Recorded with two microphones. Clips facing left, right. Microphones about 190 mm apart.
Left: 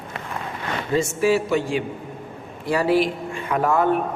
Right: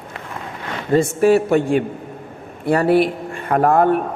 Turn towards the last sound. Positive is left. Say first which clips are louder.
# right 5 dB
turn(degrees=-55)  # may be behind; listen again after turning